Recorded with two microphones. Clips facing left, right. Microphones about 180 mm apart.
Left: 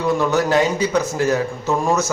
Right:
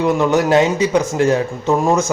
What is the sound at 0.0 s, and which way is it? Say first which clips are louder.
Speech: right 3 dB; 20° right (ahead or behind).